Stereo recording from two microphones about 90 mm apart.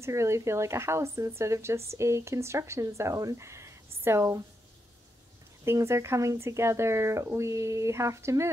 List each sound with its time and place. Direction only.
0.0 s speech: 35° right (ahead or behind)
5.7 s speech: 30° right (ahead or behind)